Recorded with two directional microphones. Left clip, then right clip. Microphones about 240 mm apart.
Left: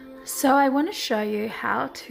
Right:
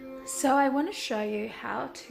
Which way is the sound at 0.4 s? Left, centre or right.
Left.